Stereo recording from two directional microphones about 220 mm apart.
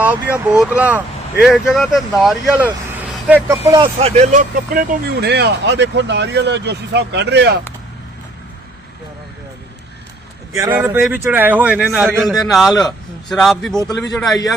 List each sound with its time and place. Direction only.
0.0 s speech: 5° right (ahead or behind); by 7.6 s 50° right (ahead or behind)
10.5 s a man's voice: 10° right (ahead or behind)